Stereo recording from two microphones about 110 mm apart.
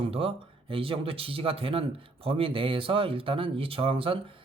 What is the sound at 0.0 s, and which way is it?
Speech, 60° right (ahead or behind).